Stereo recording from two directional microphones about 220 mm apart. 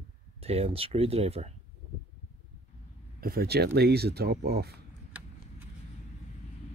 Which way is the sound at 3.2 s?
45° right (ahead or behind).